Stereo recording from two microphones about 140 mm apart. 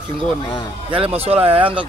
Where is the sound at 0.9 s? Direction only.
45° right (ahead or behind).